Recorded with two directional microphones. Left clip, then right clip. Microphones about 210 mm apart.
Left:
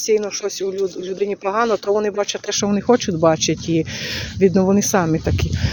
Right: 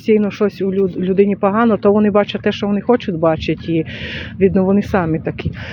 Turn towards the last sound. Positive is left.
turn(degrees=-5)  # may be behind; listen again after turning